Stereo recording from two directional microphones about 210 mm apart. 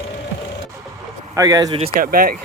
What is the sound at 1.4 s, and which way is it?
Speech, 15° right (ahead or behind).